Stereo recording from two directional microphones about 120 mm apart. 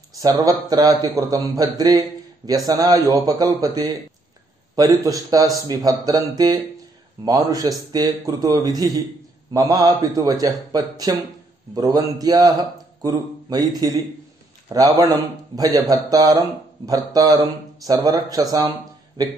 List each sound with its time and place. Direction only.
0.2 s a man's voice: 30° right (ahead or behind)